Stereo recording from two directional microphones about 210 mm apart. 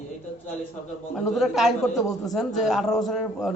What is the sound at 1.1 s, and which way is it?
A man's voice, centre (ahead or behind).